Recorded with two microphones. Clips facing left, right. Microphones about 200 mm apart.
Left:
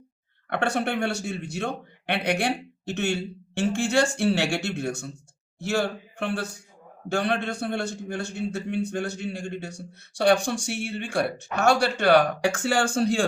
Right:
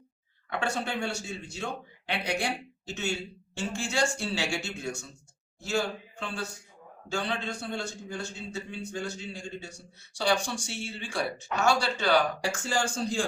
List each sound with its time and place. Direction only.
0.5 s speech: 65° left (ahead or behind)